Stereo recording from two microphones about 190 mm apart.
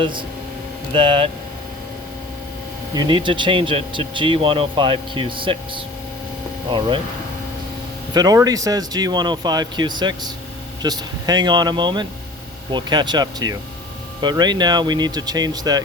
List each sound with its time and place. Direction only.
0.0 s speech: 25° right (ahead or behind)
2.9 s speech: 25° right (ahead or behind)
8.1 s speech: 20° right (ahead or behind)